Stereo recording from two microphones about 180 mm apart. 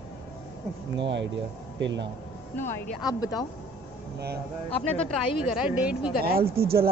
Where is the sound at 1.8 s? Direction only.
85° right.